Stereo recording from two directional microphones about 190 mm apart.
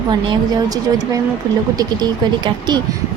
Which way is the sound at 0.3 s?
20° right (ahead or behind).